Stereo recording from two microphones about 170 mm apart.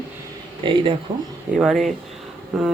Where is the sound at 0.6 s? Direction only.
30° right (ahead or behind).